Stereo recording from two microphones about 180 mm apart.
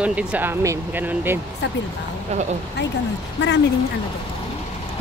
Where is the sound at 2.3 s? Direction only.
35° right (ahead or behind).